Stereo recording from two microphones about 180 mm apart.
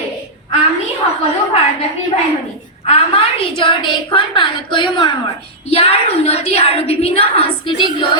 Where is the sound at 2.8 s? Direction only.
35° left (ahead or behind).